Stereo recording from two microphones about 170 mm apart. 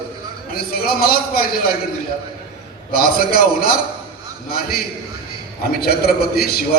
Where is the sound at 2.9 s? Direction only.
60° left (ahead or behind).